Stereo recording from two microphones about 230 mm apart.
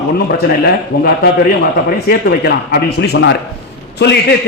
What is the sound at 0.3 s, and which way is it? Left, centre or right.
A man's voice, left.